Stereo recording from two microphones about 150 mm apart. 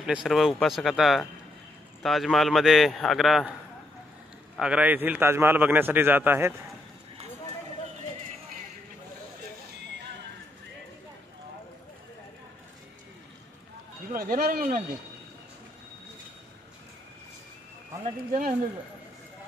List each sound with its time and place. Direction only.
0.0 s a man's voice: 5° right (ahead or behind)
4.6 s a man's voice: 10° right (ahead or behind)
14.1 s speech: 70° right (ahead or behind)